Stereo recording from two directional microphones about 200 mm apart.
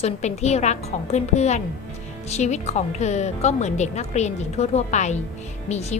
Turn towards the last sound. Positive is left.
turn(degrees=35)  # may be behind; listen again after turning